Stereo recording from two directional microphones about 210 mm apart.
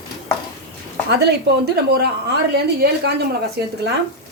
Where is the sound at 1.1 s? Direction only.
50° right (ahead or behind).